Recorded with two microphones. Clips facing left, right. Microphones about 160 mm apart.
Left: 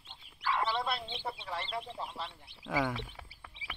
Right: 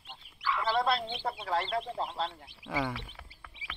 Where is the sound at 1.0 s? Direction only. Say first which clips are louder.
Right 5 dB; 50° right (ahead or behind).